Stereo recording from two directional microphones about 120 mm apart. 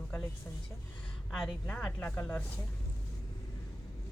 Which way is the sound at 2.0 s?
15° left (ahead or behind).